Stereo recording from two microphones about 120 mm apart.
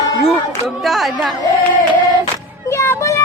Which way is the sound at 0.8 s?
Centre (ahead or behind).